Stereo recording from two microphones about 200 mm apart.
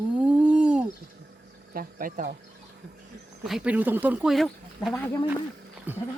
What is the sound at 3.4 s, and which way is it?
Speech, 5° right (ahead or behind).